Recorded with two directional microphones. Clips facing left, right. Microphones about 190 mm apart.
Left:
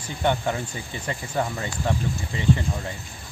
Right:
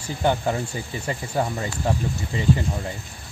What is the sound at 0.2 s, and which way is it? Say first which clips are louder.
Speech: right 2 dB; 35° right (ahead or behind).